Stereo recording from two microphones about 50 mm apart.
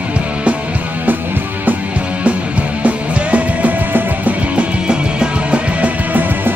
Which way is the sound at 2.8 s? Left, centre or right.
Right.